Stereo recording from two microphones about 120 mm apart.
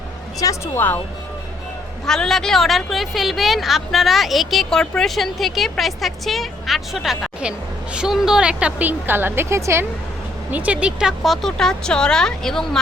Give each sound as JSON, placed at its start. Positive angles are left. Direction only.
{"t": 0.3, "sound": "speech", "side_deg": 25}
{"t": 2.0, "sound": "a woman's voice", "side_deg": 5}
{"t": 10.5, "sound": "speech", "side_deg": -10}